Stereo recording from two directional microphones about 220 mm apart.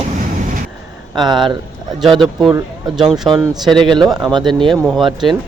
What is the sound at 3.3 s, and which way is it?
Speech, 20° right (ahead or behind).